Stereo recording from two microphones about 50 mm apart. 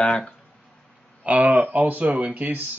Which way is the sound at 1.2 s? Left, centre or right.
Right.